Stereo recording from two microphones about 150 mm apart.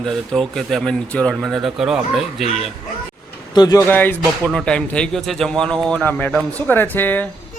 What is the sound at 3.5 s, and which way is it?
Speech, 25° left (ahead or behind).